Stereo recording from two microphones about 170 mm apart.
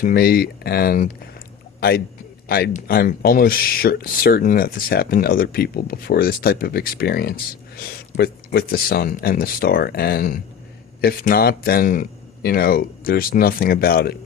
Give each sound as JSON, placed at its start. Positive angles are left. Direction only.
{"t": 0.0, "sound": "speech", "side_deg": 65}
{"t": 2.5, "sound": "speech", "side_deg": 60}